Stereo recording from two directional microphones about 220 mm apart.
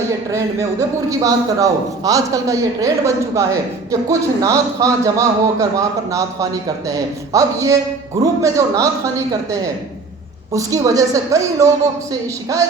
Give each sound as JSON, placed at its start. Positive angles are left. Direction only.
{"t": 0.1, "sound": "a man's voice", "side_deg": -15}